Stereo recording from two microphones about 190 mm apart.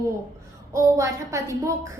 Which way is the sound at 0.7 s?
15° right (ahead or behind).